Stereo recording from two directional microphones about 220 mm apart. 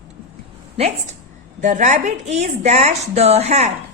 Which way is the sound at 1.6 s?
35° right (ahead or behind).